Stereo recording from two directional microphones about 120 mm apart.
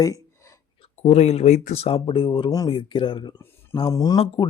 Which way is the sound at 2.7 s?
45° left (ahead or behind).